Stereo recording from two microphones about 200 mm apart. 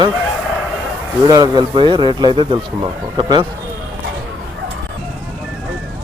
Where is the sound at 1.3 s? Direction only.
20° right (ahead or behind).